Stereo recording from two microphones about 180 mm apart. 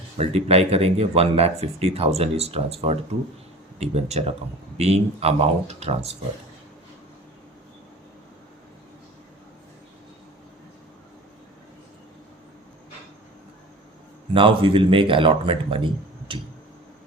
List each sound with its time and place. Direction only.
0.2 s speech: 35° right (ahead or behind)
14.3 s speech: 30° right (ahead or behind)